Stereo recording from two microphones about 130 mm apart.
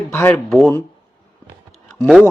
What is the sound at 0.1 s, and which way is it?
Speech, 20° left (ahead or behind).